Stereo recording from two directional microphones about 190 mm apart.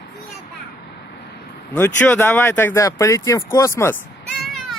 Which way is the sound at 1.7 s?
10° left (ahead or behind).